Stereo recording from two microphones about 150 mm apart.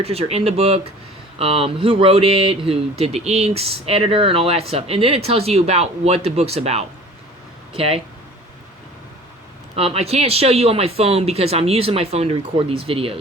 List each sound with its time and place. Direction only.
0.0 s speech: 40° right (ahead or behind)
9.7 s speech: 40° right (ahead or behind)